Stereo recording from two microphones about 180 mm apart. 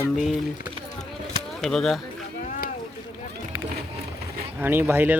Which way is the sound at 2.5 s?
55° left (ahead or behind).